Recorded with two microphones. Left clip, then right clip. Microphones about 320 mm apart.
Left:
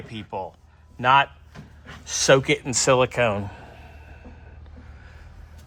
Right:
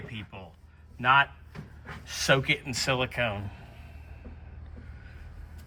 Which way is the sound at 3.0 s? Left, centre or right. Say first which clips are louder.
Left 9 dB; left.